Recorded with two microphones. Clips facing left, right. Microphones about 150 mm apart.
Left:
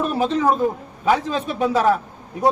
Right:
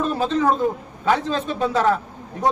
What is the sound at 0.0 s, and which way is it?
A man's voice, 15° left (ahead or behind).